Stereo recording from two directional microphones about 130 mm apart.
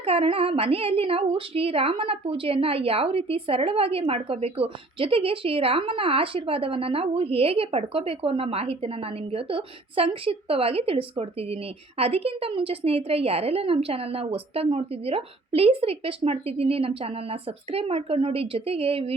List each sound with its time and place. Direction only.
0.0 s speech: 50° right (ahead or behind)